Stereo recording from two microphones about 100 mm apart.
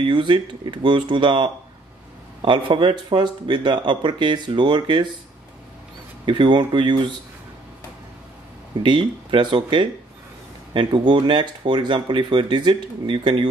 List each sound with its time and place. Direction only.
0.0 s speech: 55° right (ahead or behind)
6.2 s speech: 55° right (ahead or behind)
8.7 s speech: 50° right (ahead or behind)